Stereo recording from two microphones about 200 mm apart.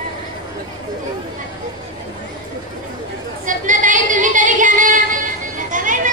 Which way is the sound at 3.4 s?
40° right (ahead or behind).